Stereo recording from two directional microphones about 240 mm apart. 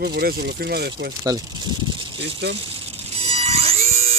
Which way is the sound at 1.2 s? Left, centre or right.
Centre.